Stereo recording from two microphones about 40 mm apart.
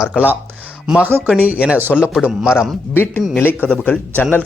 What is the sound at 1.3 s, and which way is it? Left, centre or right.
Speech, right.